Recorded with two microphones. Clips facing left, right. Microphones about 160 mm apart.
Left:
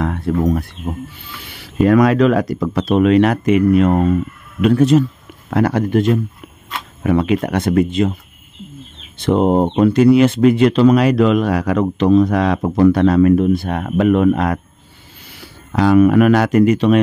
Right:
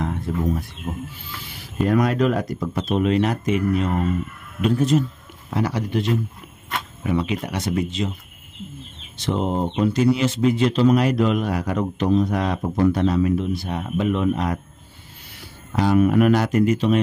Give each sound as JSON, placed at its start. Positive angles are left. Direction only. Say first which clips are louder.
{"t": 0.3, "sound": "speech", "louder": "left 10 dB", "side_deg": 65}
{"t": 0.8, "sound": "speech", "louder": "left 4 dB", "side_deg": 80}
{"t": 4.6, "sound": "speech", "louder": "left 7 dB", "side_deg": 75}
{"t": 5.5, "sound": "speech", "louder": "left 8 dB", "side_deg": 60}
{"t": 9.2, "sound": "speech", "louder": "left 9 dB", "side_deg": 55}
{"t": 15.7, "sound": "speech", "louder": "left 6 dB", "side_deg": 90}